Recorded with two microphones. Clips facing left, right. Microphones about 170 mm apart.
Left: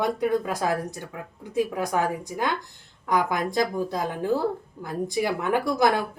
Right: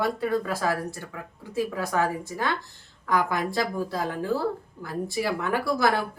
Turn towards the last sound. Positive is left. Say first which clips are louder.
# left 2 dB
turn(degrees=20)  # may be behind; listen again after turning